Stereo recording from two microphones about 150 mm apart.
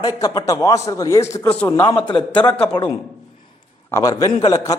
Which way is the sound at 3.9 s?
20° left (ahead or behind).